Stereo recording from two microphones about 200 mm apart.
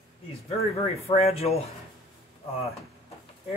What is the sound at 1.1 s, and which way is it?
Speech, 30° left (ahead or behind).